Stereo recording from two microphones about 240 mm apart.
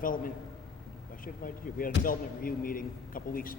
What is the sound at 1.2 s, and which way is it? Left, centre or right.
A man's voice, left.